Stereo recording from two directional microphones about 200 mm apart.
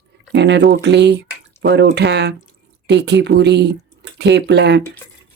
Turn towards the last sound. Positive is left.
turn(degrees=-60)  # may be behind; listen again after turning